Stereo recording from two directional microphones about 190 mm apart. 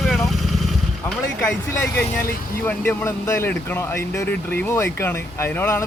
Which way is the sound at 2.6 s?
10° left (ahead or behind).